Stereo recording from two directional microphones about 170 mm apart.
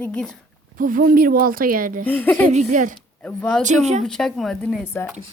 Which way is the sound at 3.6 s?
45° right (ahead or behind).